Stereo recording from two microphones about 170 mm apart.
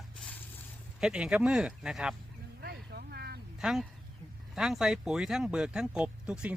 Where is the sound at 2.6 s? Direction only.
70° right (ahead or behind).